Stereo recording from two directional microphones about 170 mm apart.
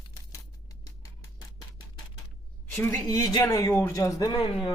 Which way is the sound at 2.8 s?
20° left (ahead or behind).